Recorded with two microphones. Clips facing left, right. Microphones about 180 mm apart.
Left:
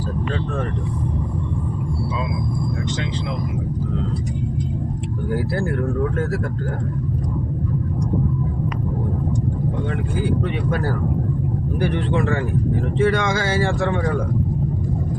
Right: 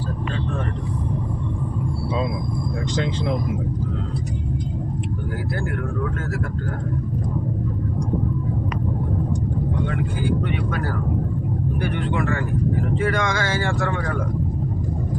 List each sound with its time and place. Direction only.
11.8 s speech: 30° left (ahead or behind)